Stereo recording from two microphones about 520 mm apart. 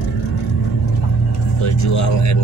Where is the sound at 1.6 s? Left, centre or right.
Left.